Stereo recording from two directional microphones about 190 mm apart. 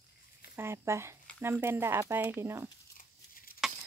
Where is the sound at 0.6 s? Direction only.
15° right (ahead or behind).